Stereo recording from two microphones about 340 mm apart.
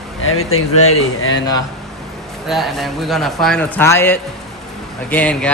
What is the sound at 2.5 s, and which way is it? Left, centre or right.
Speech, centre.